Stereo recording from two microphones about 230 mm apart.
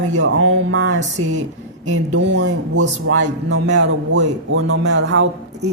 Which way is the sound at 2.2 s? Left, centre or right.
Right.